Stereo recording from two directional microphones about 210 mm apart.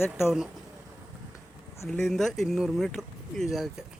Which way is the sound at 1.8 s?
Centre (ahead or behind).